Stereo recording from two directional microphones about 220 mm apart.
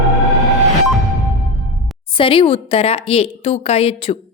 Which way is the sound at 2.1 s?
25° left (ahead or behind).